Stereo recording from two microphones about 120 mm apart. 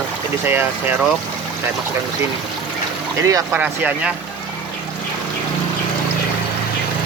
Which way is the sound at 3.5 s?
10° right (ahead or behind).